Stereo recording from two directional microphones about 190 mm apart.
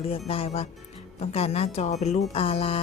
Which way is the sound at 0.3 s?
30° left (ahead or behind).